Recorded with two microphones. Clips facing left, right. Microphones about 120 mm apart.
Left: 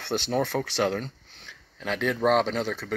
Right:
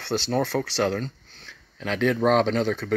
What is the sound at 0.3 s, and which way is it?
Speech, 15° left (ahead or behind).